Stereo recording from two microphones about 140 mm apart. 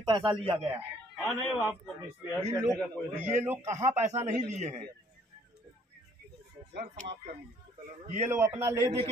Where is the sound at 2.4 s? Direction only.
25° right (ahead or behind).